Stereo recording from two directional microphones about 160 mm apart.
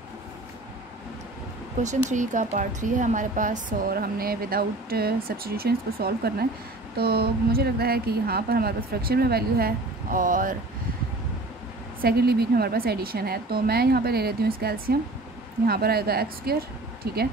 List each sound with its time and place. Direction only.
1.8 s a woman's voice: 50° right (ahead or behind)
12.0 s a woman's voice: 75° right (ahead or behind)